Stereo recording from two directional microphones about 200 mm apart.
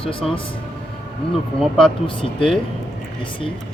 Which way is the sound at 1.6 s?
5° left (ahead or behind).